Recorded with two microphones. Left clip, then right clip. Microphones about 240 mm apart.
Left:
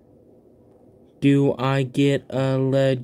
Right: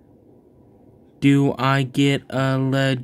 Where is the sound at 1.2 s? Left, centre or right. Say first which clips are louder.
Right 1 dB; centre.